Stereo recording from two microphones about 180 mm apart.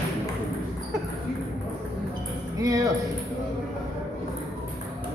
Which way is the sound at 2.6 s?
20° right (ahead or behind).